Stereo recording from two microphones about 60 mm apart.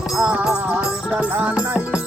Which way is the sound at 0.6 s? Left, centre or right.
Right.